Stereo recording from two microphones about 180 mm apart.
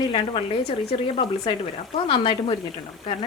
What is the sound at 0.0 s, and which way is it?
A woman's voice, 30° left (ahead or behind).